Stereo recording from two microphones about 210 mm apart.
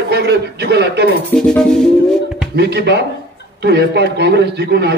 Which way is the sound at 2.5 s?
55° right (ahead or behind).